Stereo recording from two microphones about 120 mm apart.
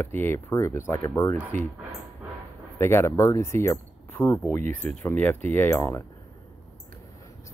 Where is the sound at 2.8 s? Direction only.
20° left (ahead or behind).